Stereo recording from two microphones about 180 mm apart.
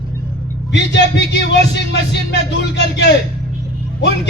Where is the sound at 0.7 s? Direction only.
70° left (ahead or behind).